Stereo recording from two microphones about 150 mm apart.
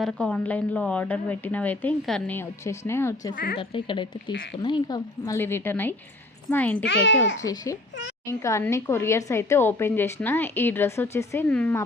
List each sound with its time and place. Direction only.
0.0 s speech: 5° left (ahead or behind)
3.3 s speech: 90° left
3.6 s speech: 35° left (ahead or behind); by 7.3 s 10° left (ahead or behind)
7.4 s speech: 25° left (ahead or behind)
11.4 s speech: 10° left (ahead or behind)